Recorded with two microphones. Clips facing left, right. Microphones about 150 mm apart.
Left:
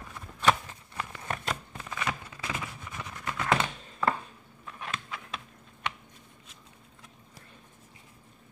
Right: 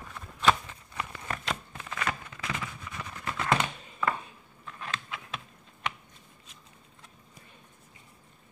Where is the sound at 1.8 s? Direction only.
15° left (ahead or behind).